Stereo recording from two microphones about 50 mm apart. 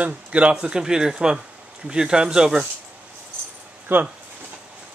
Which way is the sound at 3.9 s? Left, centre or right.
Right.